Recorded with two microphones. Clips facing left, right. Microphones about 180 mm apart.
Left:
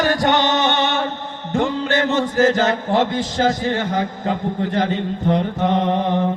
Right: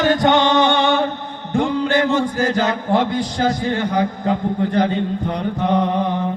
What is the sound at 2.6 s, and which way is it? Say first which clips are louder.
Chant: even; 45° left (ahead or behind).